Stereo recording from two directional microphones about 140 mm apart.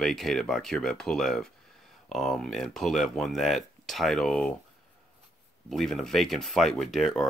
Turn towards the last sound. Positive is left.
turn(degrees=0)  # may be behind; listen again after turning